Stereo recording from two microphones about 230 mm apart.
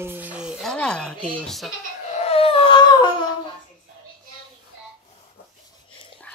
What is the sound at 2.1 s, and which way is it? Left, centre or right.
Baby cry, left.